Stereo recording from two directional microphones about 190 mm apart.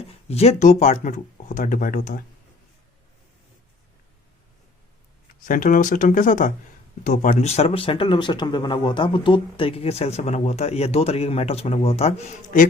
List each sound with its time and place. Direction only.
0.3 s speech: 35° left (ahead or behind)
5.3 s speech: 45° left (ahead or behind)